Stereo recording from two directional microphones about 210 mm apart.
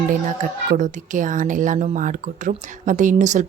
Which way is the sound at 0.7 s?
35° right (ahead or behind).